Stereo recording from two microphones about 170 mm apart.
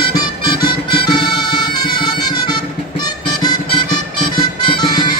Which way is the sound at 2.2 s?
25° left (ahead or behind).